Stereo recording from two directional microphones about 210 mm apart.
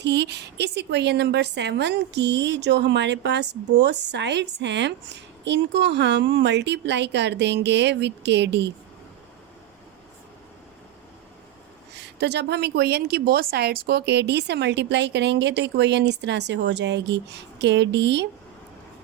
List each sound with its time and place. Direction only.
0.0 s a woman's voice: 55° right (ahead or behind)
12.2 s a woman's voice: 55° right (ahead or behind)